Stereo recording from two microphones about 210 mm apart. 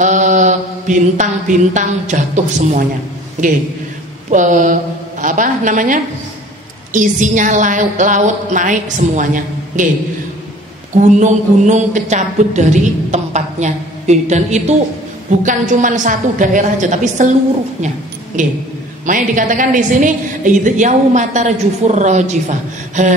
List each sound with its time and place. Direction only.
0.0 s mantra: 35° right (ahead or behind)
4.3 s a woman's voice: 35° right (ahead or behind)
11.0 s a woman's voice: 35° right (ahead or behind)
17.8 s a sound: 35° right (ahead or behind)
19.0 s a woman's voice: 40° right (ahead or behind)